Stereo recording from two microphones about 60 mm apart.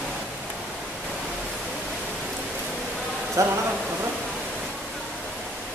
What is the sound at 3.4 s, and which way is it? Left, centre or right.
Speech, right.